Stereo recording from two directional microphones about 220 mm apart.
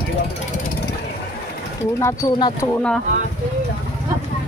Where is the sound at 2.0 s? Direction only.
15° left (ahead or behind).